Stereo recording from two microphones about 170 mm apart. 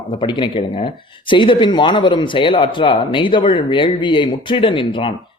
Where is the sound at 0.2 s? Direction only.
25° left (ahead or behind).